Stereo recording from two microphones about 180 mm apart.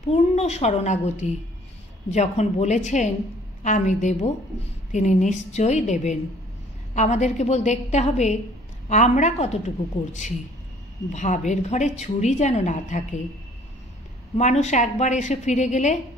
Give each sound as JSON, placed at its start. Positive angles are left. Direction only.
{"t": 0.1, "sound": "a woman's voice", "side_deg": 35}
{"t": 11.1, "sound": "a woman's voice", "side_deg": 40}
{"t": 14.3, "sound": "a woman's voice", "side_deg": 40}